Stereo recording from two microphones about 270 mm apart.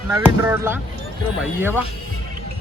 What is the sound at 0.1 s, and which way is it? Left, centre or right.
Speech, centre.